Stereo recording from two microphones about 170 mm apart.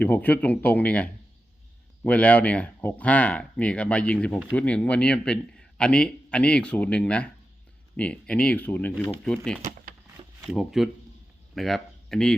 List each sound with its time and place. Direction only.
0.0 s a man's voice: 10° left (ahead or behind)
9.6 s a sound: 50° right (ahead or behind)
10.4 s speech: 5° right (ahead or behind)